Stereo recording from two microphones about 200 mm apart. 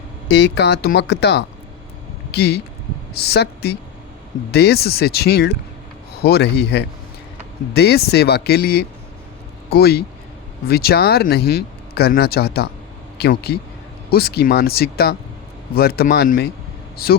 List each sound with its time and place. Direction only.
0.3 s speech: 55° left (ahead or behind)